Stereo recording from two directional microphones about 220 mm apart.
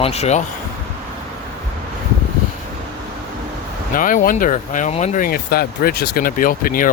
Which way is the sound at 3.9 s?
40° left (ahead or behind).